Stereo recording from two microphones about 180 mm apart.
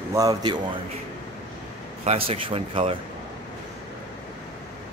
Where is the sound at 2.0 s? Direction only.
30° right (ahead or behind).